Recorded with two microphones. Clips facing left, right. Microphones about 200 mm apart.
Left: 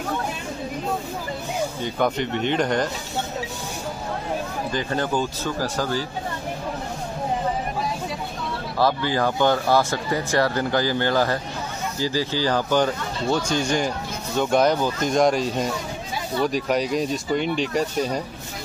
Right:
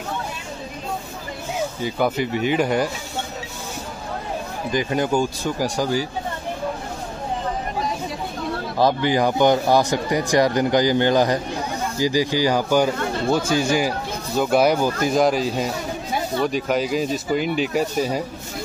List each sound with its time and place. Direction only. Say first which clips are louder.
1.8 s speech: right 2 dB; 5° right (ahead or behind)
4.7 s speech: right 4 dB; 10° right (ahead or behind)
8.7 s speech: right 3 dB; 15° right (ahead or behind)